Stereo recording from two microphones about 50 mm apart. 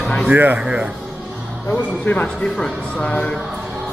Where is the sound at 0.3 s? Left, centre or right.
Right.